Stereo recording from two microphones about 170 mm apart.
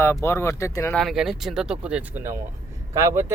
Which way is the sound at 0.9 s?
Centre (ahead or behind).